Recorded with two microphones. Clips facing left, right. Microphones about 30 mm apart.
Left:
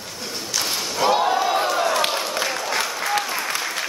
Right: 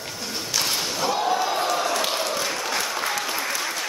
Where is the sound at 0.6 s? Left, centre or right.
Centre.